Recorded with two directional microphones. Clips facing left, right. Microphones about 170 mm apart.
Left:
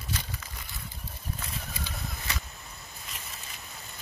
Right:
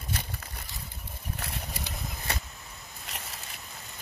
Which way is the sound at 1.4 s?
65° right (ahead or behind).